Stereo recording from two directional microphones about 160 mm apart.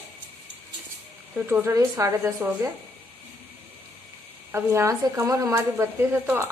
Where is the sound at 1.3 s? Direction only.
15° right (ahead or behind).